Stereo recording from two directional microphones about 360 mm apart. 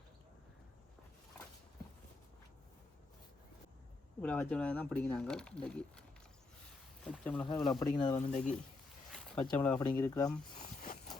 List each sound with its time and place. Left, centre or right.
4.2 s speech: centre
7.1 s speech: centre
9.1 s speech: centre